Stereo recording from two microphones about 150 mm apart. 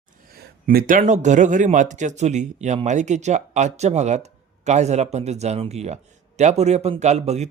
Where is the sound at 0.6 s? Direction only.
75° right (ahead or behind).